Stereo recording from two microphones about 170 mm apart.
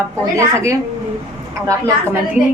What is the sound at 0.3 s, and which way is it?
Speech, 15° right (ahead or behind).